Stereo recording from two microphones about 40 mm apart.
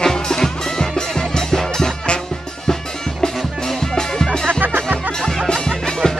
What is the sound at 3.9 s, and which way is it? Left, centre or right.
Music, centre.